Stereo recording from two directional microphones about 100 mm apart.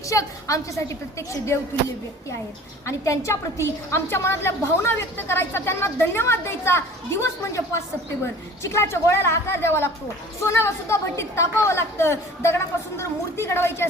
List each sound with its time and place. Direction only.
0.1 s a woman's voice: 35° left (ahead or behind)
2.8 s a woman's voice: 30° left (ahead or behind)